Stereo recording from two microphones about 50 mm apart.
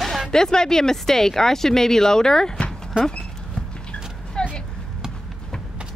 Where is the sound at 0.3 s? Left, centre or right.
Centre.